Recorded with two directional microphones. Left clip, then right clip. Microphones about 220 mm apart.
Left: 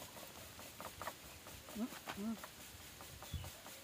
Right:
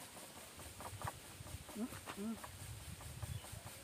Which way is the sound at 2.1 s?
20° left (ahead or behind).